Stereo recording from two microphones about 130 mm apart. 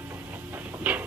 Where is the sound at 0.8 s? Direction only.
15° right (ahead or behind).